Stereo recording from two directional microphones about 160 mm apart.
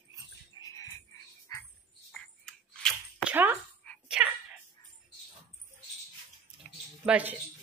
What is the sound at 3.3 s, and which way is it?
Speech, 10° right (ahead or behind).